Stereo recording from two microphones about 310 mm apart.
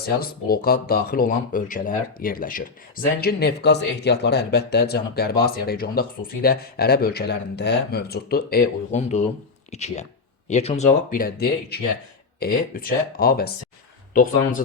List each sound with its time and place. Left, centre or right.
0.0 s speech: left